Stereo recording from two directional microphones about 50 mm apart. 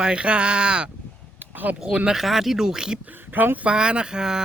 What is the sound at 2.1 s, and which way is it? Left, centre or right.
Speech, centre.